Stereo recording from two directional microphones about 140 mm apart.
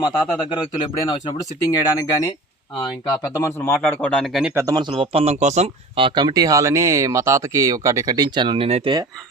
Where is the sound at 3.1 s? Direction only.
25° left (ahead or behind); by 4.5 s centre (ahead or behind).